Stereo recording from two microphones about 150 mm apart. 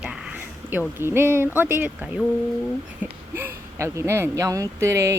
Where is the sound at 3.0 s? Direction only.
10° right (ahead or behind).